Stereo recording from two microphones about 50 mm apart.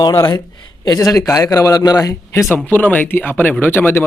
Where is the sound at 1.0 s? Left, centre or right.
Left.